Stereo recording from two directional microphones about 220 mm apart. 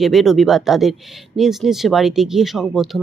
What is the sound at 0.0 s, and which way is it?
Speech, centre (ahead or behind).